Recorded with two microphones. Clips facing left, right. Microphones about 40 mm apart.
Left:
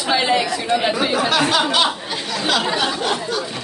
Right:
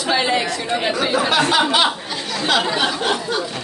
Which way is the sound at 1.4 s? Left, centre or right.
Centre.